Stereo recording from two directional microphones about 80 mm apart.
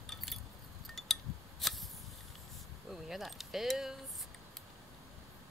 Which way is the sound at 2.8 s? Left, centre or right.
Centre.